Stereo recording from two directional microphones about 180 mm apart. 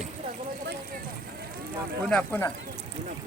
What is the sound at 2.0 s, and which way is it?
Speech, 10° left (ahead or behind).